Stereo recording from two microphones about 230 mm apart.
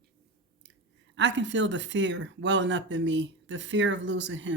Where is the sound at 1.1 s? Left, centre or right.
Right.